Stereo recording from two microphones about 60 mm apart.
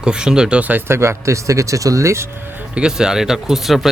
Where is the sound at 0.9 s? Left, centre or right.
Right.